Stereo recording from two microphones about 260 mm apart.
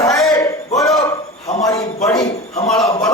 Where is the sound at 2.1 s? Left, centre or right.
Centre.